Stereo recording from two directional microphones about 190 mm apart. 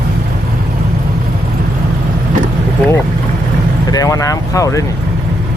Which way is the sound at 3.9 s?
15° left (ahead or behind).